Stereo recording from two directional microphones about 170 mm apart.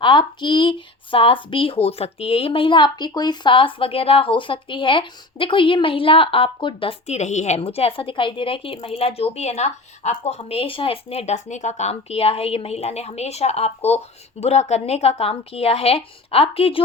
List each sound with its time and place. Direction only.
0.0 s speech: 30° left (ahead or behind)